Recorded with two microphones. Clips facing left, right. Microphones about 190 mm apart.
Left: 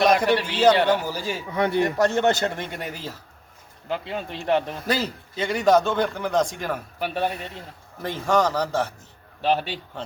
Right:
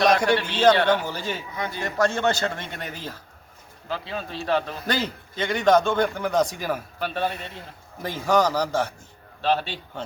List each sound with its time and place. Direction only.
0.0 s a man's voice: 5° left (ahead or behind)
1.5 s speech: 65° left (ahead or behind)
1.8 s a man's voice: 20° left (ahead or behind)
3.8 s a man's voice: 20° left (ahead or behind)
4.9 s a man's voice: 5° left (ahead or behind)
7.0 s a man's voice: 10° left (ahead or behind)
8.0 s a man's voice: centre (ahead or behind)
9.4 s a man's voice: 15° left (ahead or behind)